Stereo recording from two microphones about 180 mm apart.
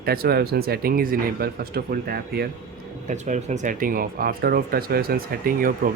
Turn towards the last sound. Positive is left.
turn(degrees=-55)  # may be behind; listen again after turning